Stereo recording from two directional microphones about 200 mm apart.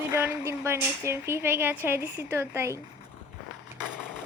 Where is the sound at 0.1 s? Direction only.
15° right (ahead or behind).